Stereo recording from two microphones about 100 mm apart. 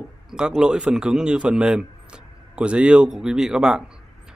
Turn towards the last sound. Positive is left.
turn(degrees=-5)  # may be behind; listen again after turning